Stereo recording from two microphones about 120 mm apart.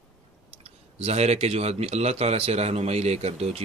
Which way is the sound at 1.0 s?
60° right (ahead or behind).